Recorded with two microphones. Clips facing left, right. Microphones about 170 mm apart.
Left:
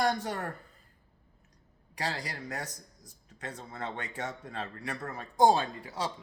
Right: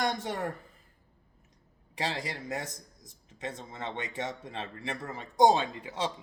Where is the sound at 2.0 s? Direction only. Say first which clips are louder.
Right 2 dB; 25° right (ahead or behind).